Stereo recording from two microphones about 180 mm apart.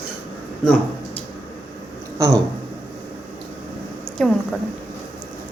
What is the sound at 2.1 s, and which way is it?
Speech, 20° right (ahead or behind).